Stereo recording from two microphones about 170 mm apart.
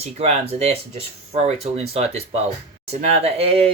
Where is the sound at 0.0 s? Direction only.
40° right (ahead or behind).